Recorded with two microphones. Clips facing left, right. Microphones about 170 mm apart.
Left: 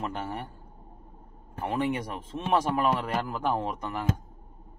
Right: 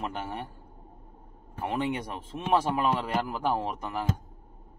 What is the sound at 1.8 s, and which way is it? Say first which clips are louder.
Speech: left 2 dB; 25° right (ahead or behind).